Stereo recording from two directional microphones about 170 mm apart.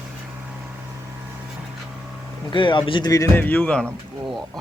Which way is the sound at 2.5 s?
30° left (ahead or behind).